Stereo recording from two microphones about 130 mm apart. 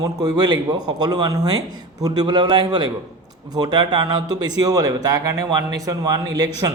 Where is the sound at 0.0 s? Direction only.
30° right (ahead or behind).